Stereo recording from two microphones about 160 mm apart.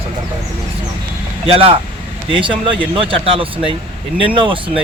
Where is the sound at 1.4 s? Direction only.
35° right (ahead or behind).